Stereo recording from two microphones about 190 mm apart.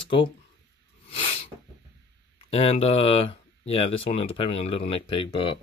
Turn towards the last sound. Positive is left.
turn(degrees=25)  # may be behind; listen again after turning